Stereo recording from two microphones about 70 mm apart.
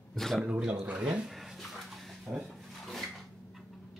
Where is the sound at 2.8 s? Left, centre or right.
Centre.